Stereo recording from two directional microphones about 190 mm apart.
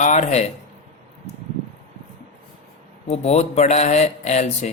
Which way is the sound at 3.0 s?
35° left (ahead or behind).